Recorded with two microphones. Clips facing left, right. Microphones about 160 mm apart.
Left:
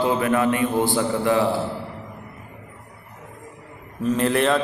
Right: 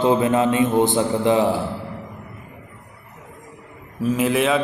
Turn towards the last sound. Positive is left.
turn(degrees=-5)  # may be behind; listen again after turning